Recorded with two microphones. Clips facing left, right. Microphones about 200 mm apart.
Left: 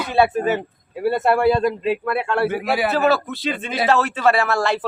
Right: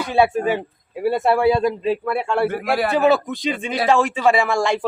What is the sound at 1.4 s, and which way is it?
Speech, 10° right (ahead or behind).